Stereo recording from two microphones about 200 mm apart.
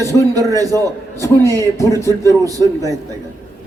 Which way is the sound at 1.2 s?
15° left (ahead or behind).